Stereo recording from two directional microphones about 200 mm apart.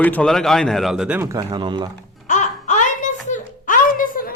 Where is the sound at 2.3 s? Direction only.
35° left (ahead or behind).